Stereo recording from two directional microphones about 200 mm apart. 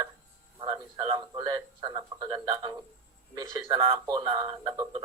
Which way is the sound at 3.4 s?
15° right (ahead or behind).